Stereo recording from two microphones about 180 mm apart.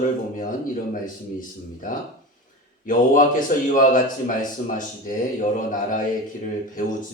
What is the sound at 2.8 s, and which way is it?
A man's voice, 45° left (ahead or behind).